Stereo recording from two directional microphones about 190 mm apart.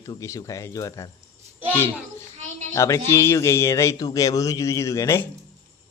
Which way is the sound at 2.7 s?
15° left (ahead or behind).